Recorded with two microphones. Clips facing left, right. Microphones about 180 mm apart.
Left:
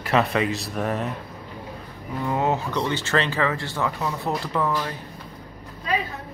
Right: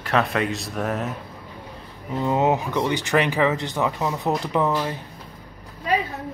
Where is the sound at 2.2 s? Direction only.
20° right (ahead or behind).